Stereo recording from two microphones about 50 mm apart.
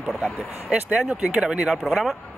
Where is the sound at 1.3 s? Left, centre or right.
Centre.